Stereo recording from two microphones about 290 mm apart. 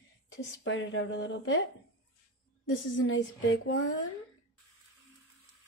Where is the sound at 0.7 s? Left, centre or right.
Left.